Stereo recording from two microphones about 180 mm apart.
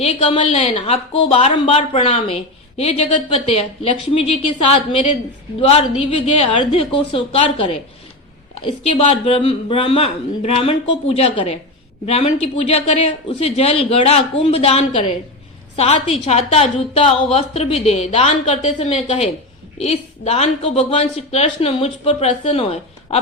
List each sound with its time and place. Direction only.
0.0 s a woman's voice: 35° left (ahead or behind)
5.5 s a woman's voice: 35° left (ahead or behind)